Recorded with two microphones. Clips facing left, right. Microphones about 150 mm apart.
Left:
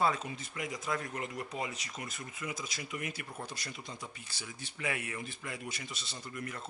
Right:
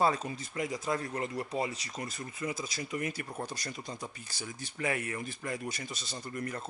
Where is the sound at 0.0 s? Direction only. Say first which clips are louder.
Right 3 dB; 40° right (ahead or behind).